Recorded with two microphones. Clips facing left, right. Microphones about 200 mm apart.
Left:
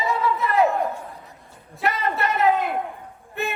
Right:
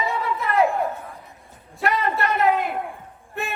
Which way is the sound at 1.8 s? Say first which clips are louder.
Right 1 dB; centre (ahead or behind).